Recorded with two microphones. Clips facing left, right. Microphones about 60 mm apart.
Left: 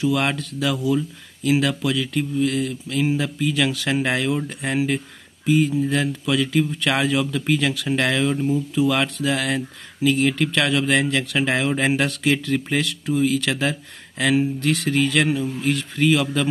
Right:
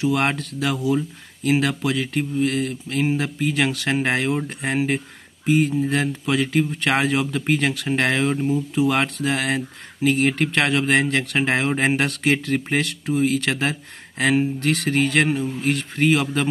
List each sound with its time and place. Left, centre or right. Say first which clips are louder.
0.0 s speech: even; right